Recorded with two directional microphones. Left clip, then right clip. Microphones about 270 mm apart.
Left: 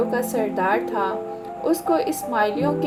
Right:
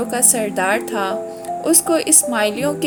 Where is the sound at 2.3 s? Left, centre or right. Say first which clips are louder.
Left 1 dB; right.